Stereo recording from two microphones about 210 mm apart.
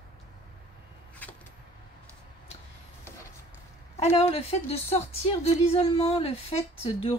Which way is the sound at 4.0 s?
30° left (ahead or behind).